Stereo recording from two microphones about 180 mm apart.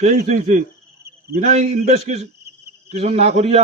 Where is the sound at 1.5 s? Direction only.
35° right (ahead or behind).